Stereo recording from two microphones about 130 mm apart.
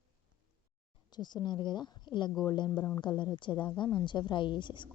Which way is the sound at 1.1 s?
35° left (ahead or behind).